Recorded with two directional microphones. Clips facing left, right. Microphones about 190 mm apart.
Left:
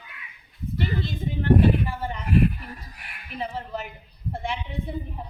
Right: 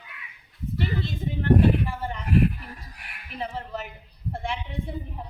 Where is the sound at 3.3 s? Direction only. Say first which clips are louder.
Left 1 dB; centre (ahead or behind).